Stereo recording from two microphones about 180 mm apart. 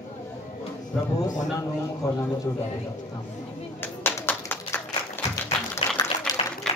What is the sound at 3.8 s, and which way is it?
Clapping, 10° left (ahead or behind).